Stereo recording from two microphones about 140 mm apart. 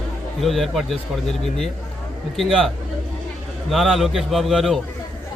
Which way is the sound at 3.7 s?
Centre (ahead or behind).